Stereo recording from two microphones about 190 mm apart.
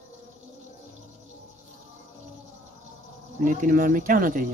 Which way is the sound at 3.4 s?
45° right (ahead or behind).